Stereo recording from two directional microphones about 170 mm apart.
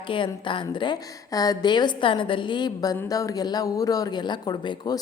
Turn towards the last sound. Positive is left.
turn(degrees=25)  # may be behind; listen again after turning